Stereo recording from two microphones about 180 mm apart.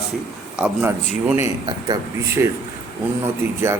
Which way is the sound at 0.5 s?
10° right (ahead or behind).